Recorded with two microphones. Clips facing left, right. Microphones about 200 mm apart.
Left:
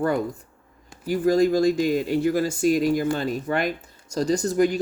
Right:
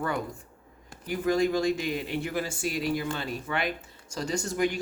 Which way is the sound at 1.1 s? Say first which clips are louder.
Left 6 dB; 40° left (ahead or behind).